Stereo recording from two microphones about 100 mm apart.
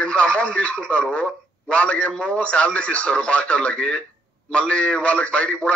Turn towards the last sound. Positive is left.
turn(degrees=10)  # may be behind; listen again after turning